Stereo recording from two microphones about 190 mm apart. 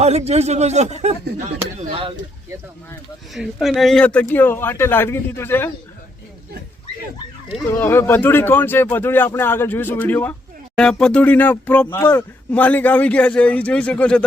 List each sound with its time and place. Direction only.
0.0 s speech: 35° right (ahead or behind)
3.3 s speech: centre (ahead or behind)
7.6 s speech: 10° left (ahead or behind)